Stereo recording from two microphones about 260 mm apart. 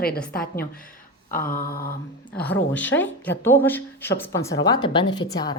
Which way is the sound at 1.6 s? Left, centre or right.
Left.